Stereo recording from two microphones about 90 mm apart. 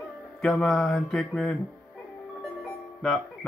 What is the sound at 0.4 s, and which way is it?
Speech, 5° left (ahead or behind).